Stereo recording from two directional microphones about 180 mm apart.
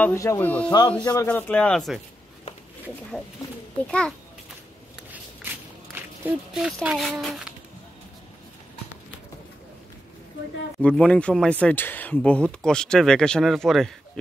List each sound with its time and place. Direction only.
0.0 s speech: 15° left (ahead or behind)
0.7 s speech: 25° left (ahead or behind)
1.2 s speech: 10° left (ahead or behind)
3.8 s speech: 5° left (ahead or behind)
5.9 s speech: 10° right (ahead or behind)
10.8 s speech: 5° left (ahead or behind)